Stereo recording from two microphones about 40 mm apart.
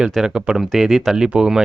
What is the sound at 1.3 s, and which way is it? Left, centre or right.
Speech, right.